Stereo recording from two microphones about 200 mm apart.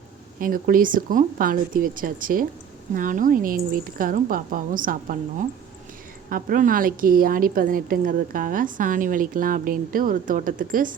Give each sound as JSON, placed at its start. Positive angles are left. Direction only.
{"t": 0.3, "sound": "a woman's voice", "side_deg": -45}